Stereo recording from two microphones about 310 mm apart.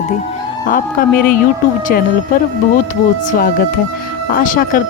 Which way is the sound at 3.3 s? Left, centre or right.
Left.